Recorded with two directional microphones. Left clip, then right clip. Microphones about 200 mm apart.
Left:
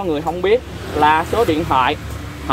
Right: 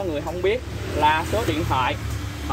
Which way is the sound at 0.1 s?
45° left (ahead or behind).